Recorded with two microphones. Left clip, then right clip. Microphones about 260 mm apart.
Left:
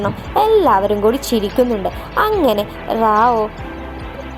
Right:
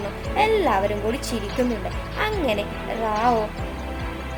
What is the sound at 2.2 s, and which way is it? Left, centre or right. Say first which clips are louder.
Speech: left 8 dB; left.